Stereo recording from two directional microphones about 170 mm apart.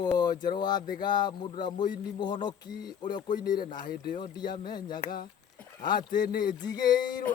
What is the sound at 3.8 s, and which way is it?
Speech, 65° left (ahead or behind).